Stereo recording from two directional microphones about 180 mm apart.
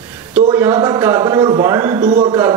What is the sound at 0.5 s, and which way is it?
A man's voice, 15° right (ahead or behind).